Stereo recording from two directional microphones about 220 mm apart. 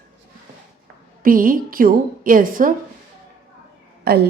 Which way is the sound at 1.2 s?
40° right (ahead or behind).